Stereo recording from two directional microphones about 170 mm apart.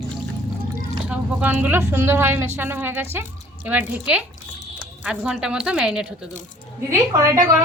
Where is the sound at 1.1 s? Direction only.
10° right (ahead or behind).